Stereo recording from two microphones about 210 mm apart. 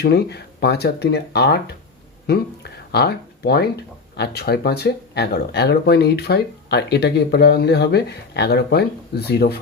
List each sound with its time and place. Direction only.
0.0 s speech: 50° left (ahead or behind)